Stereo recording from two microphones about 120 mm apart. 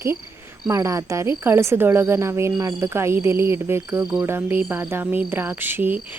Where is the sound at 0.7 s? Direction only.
25° right (ahead or behind).